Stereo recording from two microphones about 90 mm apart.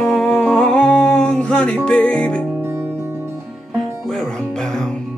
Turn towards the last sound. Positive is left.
turn(degrees=5)  # may be behind; listen again after turning